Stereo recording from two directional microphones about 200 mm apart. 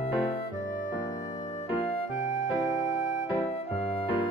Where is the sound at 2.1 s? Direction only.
40° left (ahead or behind).